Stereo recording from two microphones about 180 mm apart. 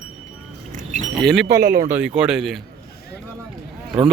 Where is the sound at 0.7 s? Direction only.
45° right (ahead or behind).